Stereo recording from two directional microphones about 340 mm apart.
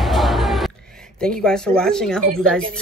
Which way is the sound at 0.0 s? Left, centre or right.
Centre.